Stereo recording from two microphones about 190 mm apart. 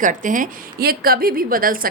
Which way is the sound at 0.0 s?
45° right (ahead or behind).